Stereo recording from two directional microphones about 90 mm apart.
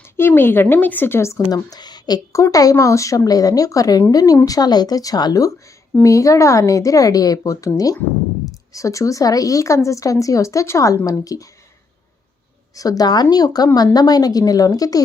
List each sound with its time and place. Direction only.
0.2 s speech: 25° left (ahead or behind)
1.5 s a woman's voice: 45° left (ahead or behind)
6.0 s speech: 35° left (ahead or behind)
8.7 s speech: 35° left (ahead or behind)
12.7 s a woman's voice: 40° left (ahead or behind)